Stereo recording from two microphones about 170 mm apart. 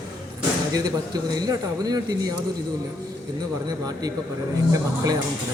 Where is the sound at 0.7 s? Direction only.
20° right (ahead or behind).